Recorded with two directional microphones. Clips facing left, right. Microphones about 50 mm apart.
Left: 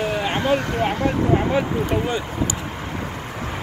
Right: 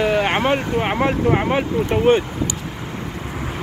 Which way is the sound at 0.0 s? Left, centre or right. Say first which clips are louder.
Right 5 dB; right.